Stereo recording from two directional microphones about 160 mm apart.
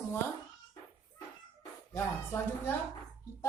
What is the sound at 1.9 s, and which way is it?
Speech, 15° left (ahead or behind).